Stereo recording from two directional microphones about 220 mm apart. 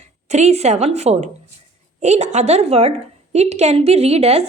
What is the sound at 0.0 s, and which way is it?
A woman's voice, 30° right (ahead or behind).